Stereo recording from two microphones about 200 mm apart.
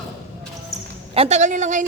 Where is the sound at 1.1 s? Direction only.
30° right (ahead or behind).